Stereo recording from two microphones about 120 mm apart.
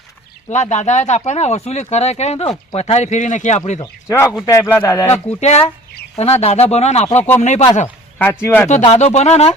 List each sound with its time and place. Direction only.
0.5 s speech: 75° left (ahead or behind)
4.4 s speech: 25° left (ahead or behind)
5.4 s speech: 65° left (ahead or behind)
8.2 s speech: 20° left (ahead or behind)
8.8 s speech: 60° left (ahead or behind)